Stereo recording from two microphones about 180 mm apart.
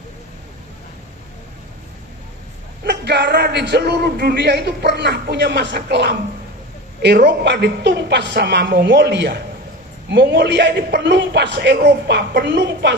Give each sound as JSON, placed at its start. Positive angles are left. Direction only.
{"t": 2.8, "sound": "a man's voice", "side_deg": -70}